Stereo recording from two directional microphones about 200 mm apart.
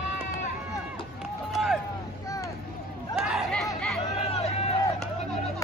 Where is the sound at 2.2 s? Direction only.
15° left (ahead or behind).